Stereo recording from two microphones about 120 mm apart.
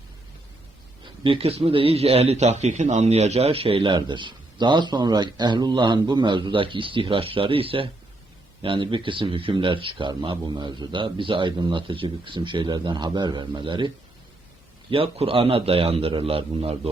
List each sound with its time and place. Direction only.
1.0 s a man's voice: 45° right (ahead or behind)